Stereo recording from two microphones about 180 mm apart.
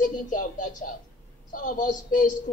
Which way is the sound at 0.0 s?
45° left (ahead or behind).